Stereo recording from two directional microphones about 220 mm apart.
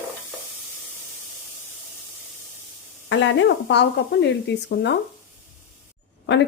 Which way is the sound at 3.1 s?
55° left (ahead or behind).